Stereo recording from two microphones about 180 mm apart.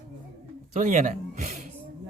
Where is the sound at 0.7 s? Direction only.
45° right (ahead or behind).